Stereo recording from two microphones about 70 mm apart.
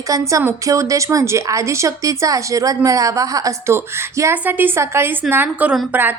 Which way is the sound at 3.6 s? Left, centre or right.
Right.